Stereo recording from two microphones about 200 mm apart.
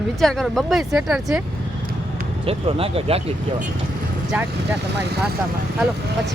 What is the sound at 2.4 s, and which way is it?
Speech, 30° right (ahead or behind).